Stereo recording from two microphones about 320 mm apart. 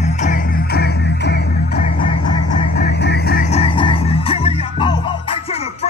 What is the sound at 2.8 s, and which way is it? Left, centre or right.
Music, left.